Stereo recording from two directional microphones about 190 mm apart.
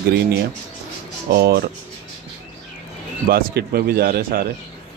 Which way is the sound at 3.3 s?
55° right (ahead or behind).